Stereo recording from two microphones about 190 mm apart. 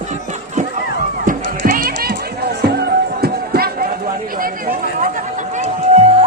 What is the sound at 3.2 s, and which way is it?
Music, 55° right (ahead or behind).